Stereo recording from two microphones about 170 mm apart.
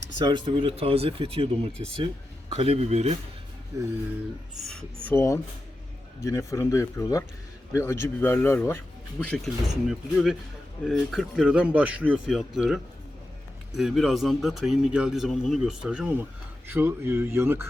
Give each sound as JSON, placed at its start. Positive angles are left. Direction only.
{"t": 0.2, "sound": "speech", "side_deg": -25}
{"t": 4.6, "sound": "speech", "side_deg": 0}
{"t": 5.0, "sound": "a man's voice", "side_deg": 15}